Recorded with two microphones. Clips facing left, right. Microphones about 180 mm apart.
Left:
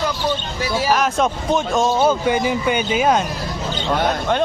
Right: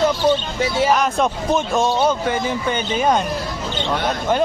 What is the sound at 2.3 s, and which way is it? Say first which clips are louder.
Speech: left 3 dB; 15° left (ahead or behind).